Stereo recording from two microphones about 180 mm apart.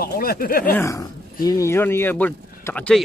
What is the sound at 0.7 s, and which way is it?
Speech, 15° left (ahead or behind).